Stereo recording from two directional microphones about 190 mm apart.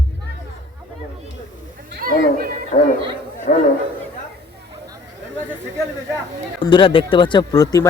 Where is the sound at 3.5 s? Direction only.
40° left (ahead or behind).